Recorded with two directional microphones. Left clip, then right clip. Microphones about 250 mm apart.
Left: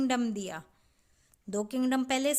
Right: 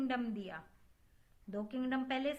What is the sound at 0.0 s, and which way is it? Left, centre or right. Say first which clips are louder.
A woman's voice: left 8 dB; left.